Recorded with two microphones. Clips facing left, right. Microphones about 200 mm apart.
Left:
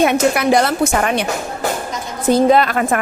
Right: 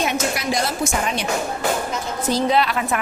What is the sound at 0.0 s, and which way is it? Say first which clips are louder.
Speech: left 9 dB; 60° left (ahead or behind).